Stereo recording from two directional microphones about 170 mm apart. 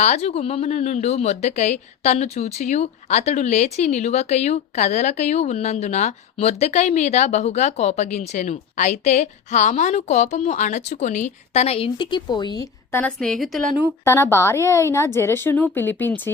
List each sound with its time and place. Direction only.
0.0 s a woman's voice: 40° left (ahead or behind); by 13.7 s centre (ahead or behind)
14.0 s a woman's voice: 15° left (ahead or behind)